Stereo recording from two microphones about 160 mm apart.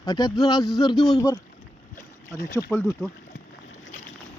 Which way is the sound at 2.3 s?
20° left (ahead or behind).